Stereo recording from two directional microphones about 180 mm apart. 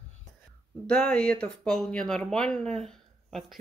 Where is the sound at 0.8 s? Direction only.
5° left (ahead or behind).